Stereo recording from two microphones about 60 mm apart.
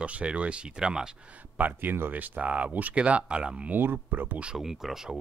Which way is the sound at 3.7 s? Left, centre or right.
Right.